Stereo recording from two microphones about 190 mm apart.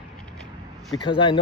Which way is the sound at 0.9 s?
25° left (ahead or behind).